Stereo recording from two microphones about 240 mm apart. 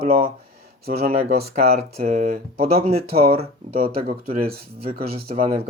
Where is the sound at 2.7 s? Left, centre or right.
Right.